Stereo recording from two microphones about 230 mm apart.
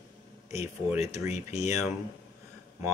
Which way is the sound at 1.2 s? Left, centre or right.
Left.